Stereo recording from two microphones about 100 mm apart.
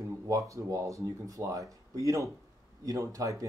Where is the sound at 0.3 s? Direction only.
30° right (ahead or behind).